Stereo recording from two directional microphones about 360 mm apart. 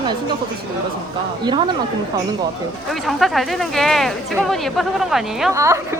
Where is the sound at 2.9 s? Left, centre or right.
Centre.